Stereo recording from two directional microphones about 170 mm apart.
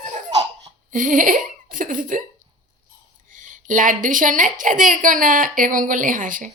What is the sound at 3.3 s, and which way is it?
A woman's voice, 50° right (ahead or behind).